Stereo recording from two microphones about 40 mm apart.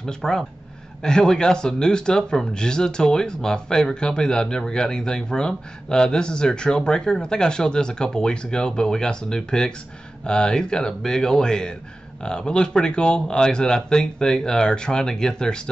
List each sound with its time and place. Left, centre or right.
0.0 s speech: centre